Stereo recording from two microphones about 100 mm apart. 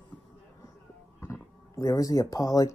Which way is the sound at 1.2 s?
30° left (ahead or behind).